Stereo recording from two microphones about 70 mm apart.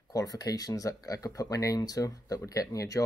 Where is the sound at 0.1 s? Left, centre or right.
Left.